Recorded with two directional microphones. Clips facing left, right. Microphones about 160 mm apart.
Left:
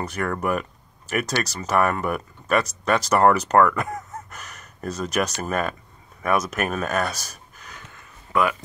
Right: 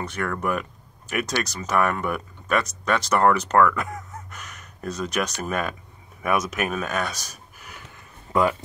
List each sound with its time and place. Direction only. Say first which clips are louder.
0.1 s speech: left 2 dB; 5° left (ahead or behind)
7.5 s a sound: even; 10° right (ahead or behind)
8.3 s speech: right 1 dB; 25° right (ahead or behind)